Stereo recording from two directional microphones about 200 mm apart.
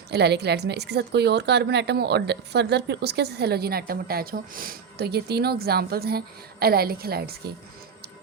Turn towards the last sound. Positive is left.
turn(degrees=-50)  # may be behind; listen again after turning